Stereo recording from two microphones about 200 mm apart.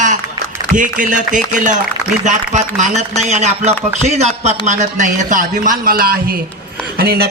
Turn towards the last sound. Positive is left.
turn(degrees=-50)  # may be behind; listen again after turning